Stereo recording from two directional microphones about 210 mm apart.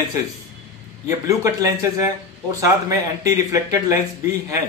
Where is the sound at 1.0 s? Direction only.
15° right (ahead or behind).